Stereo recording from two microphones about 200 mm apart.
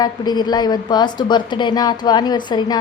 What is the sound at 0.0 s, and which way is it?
A woman's voice, 20° left (ahead or behind).